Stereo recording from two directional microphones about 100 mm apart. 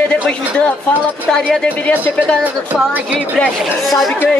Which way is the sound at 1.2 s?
5° left (ahead or behind).